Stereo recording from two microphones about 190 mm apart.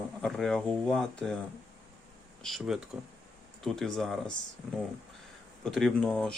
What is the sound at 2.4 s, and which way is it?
Speech, centre (ahead or behind).